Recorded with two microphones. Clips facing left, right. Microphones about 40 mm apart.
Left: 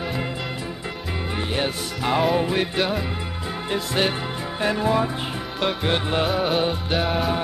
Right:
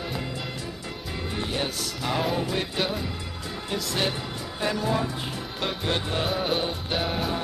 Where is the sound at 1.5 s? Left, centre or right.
Left.